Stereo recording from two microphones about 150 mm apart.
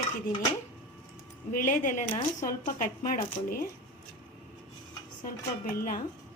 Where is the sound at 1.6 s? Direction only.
60° left (ahead or behind).